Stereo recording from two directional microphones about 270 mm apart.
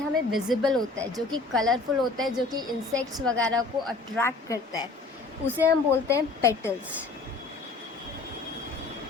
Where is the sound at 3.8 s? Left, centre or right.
Centre.